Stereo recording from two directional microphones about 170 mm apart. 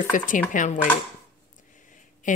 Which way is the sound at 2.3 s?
50° left (ahead or behind).